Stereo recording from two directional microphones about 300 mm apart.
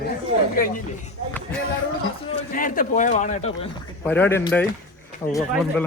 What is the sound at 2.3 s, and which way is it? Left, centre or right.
A man's voice, left.